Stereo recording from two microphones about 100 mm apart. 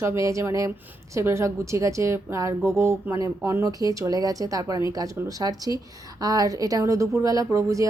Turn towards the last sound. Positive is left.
turn(degrees=-35)  # may be behind; listen again after turning